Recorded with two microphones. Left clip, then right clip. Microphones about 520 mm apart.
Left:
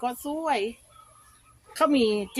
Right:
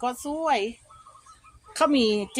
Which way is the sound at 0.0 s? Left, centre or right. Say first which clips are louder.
Right 2 dB; left.